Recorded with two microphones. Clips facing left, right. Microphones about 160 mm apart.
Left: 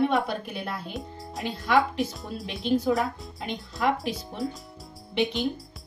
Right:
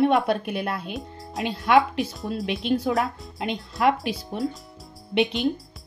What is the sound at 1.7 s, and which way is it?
Speech, 70° right (ahead or behind).